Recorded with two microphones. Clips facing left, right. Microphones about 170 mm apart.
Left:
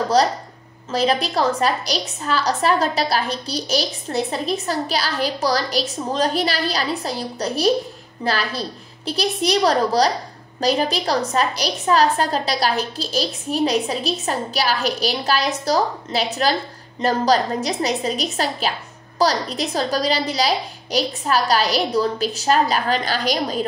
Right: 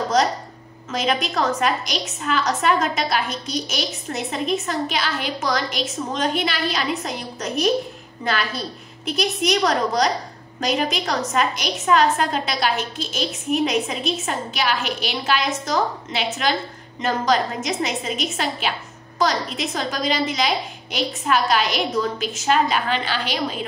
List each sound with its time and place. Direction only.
0.2 s a woman's voice: 35° left (ahead or behind)